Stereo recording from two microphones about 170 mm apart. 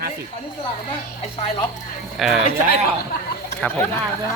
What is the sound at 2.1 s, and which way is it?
Speech, centre (ahead or behind).